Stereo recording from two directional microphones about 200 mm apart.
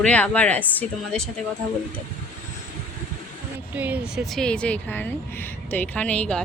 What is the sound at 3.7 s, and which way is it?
A woman's voice, 10° right (ahead or behind).